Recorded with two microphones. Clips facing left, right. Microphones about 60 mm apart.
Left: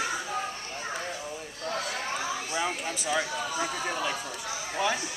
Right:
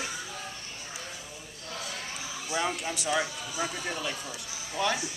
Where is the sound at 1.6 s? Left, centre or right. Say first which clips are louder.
Left 7 dB; left.